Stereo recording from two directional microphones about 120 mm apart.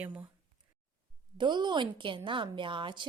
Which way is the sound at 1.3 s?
40° right (ahead or behind).